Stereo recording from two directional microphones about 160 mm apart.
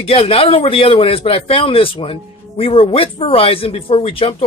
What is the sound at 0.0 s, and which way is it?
A man's voice, 35° left (ahead or behind).